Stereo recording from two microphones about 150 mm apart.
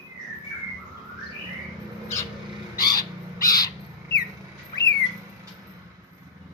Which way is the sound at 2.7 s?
25° left (ahead or behind).